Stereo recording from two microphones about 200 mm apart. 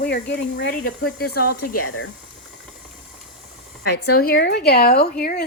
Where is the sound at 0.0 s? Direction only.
55° left (ahead or behind).